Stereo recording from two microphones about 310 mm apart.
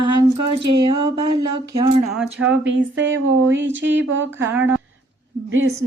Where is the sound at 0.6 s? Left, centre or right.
Centre.